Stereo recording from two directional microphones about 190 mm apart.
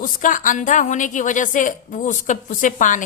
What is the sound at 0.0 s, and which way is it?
A woman's voice, 45° left (ahead or behind).